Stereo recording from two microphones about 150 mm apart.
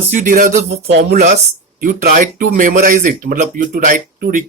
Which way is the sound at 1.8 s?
65° right (ahead or behind).